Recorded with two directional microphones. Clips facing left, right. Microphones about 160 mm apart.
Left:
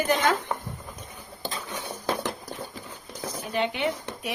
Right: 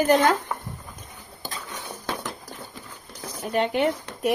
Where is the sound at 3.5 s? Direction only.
45° right (ahead or behind).